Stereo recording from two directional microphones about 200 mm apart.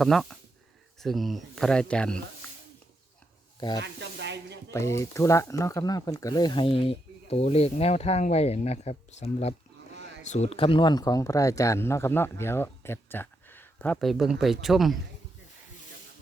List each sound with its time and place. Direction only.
0.0 s speech: centre (ahead or behind)
3.8 s speech: 60° right (ahead or behind)
4.7 s speech: 15° left (ahead or behind)